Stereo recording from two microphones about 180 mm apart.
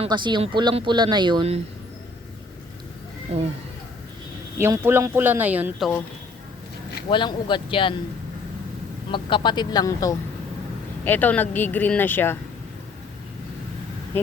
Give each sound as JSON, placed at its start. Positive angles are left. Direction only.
{"t": 0.0, "sound": "speech", "side_deg": -25}
{"t": 3.3, "sound": "speech", "side_deg": -35}
{"t": 4.5, "sound": "speech", "side_deg": -15}
{"t": 7.1, "sound": "speech", "side_deg": 25}
{"t": 9.1, "sound": "speech", "side_deg": 25}